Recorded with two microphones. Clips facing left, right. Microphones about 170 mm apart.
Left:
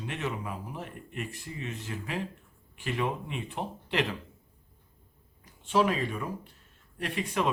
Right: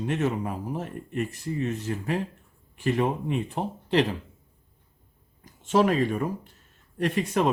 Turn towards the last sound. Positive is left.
turn(degrees=-45)  # may be behind; listen again after turning